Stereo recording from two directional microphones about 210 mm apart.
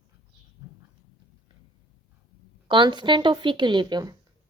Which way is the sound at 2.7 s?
20° right (ahead or behind).